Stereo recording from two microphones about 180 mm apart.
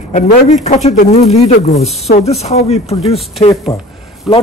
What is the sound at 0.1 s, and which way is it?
Speech, 40° left (ahead or behind).